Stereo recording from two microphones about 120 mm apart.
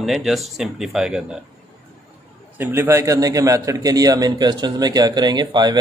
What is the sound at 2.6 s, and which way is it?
A man's voice, 20° right (ahead or behind).